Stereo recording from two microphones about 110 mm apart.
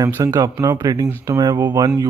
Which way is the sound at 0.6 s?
35° right (ahead or behind).